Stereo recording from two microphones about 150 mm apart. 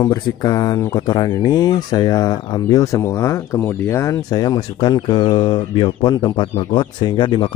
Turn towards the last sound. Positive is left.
turn(degrees=30)  # may be behind; listen again after turning